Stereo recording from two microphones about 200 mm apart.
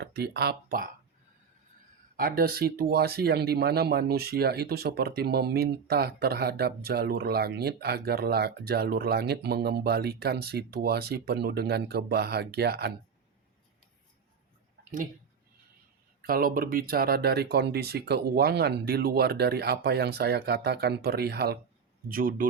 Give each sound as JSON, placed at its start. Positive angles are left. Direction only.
{"t": 0.0, "sound": "speech", "side_deg": -55}
{"t": 2.1, "sound": "speech", "side_deg": -45}
{"t": 16.2, "sound": "speech", "side_deg": -45}